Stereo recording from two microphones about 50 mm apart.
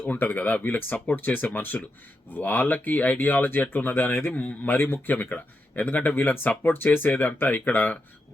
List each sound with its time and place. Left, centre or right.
0.1 s speech: left